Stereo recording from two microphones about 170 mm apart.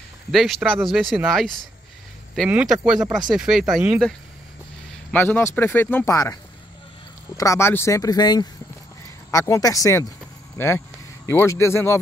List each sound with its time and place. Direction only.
0.3 s speech: centre (ahead or behind)
5.1 s speech: 10° left (ahead or behind)
11.2 s speech: 15° left (ahead or behind)